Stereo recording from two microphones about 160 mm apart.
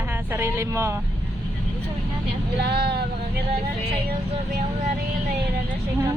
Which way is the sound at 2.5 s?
90° right.